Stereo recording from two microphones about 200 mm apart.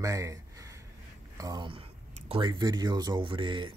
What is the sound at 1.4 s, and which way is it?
Speech, 20° right (ahead or behind).